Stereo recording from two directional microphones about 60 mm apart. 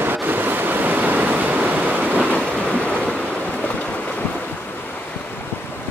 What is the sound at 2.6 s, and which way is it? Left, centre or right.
Waves, centre.